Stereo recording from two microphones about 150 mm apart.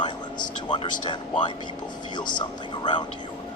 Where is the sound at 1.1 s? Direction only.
30° left (ahead or behind).